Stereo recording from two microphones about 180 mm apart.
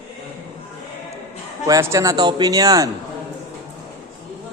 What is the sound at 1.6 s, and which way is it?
A man's voice, 20° right (ahead or behind).